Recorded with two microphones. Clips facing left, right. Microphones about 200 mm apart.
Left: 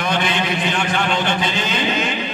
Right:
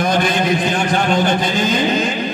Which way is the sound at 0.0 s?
40° right (ahead or behind).